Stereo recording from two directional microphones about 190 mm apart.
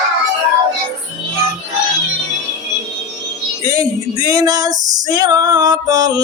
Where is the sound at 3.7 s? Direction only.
20° right (ahead or behind).